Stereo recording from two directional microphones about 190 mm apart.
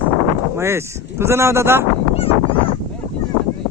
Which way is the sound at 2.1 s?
30° left (ahead or behind).